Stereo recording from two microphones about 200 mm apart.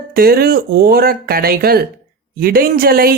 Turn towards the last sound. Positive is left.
turn(degrees=-50)  # may be behind; listen again after turning